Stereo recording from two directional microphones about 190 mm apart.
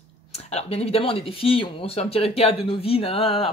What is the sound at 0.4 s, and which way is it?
Speech, 35° left (ahead or behind).